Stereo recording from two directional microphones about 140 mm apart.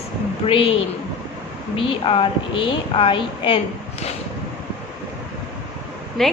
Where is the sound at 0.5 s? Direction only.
40° left (ahead or behind).